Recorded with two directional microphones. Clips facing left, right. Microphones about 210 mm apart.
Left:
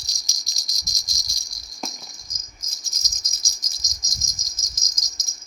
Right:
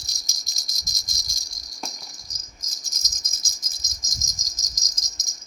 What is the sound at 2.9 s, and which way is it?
Insect, 45° right (ahead or behind).